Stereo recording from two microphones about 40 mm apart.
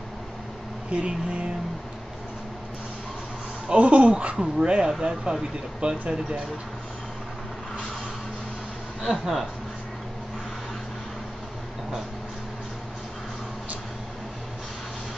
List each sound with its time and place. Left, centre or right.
0.9 s speech: right
3.6 s speech: right
4.4 s speech: centre
9.0 s speech: centre